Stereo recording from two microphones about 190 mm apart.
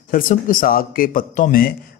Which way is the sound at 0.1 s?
45° left (ahead or behind).